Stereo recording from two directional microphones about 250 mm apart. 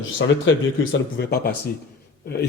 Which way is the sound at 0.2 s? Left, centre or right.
Left.